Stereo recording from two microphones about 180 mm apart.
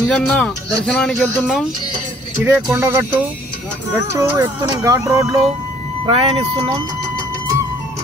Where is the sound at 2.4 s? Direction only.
10° right (ahead or behind).